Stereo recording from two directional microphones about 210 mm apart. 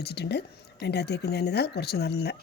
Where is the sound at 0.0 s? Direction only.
50° left (ahead or behind).